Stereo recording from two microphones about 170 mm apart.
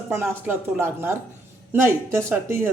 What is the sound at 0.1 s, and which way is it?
Speech, 15° right (ahead or behind).